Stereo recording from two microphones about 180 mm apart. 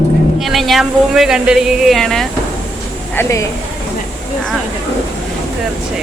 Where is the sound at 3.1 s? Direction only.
15° left (ahead or behind).